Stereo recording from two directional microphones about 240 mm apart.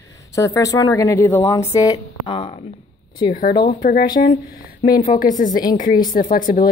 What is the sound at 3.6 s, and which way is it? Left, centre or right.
Speech, left.